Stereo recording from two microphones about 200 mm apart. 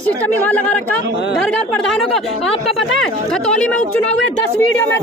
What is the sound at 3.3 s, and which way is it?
A woman's voice, 5° left (ahead or behind).